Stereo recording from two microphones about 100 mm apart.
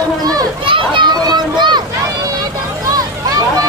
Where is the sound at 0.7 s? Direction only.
55° right (ahead or behind).